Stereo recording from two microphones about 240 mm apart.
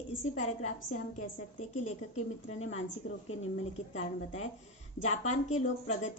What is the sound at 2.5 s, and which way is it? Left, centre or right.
A woman's voice, left.